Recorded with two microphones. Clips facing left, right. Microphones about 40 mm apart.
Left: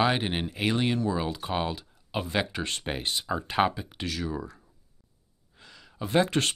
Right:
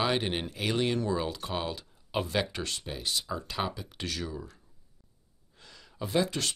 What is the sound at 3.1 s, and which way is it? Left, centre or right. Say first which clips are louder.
Speech: even; left.